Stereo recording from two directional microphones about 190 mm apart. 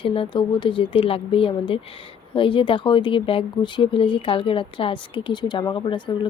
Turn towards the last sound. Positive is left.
turn(degrees=25)  # may be behind; listen again after turning